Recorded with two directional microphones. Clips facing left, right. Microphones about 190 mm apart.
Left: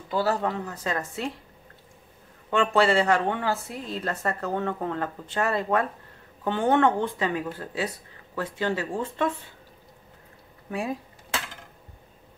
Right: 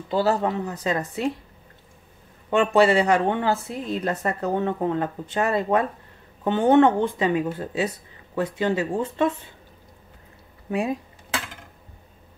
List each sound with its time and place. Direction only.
0.1 s a woman's voice: 25° right (ahead or behind)
2.5 s a woman's voice: 20° right (ahead or behind)
10.7 s a sound: 20° right (ahead or behind)